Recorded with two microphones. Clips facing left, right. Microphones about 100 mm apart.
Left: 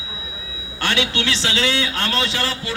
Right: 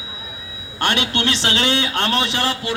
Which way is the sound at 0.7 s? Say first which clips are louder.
Right 1 dB; 55° right (ahead or behind).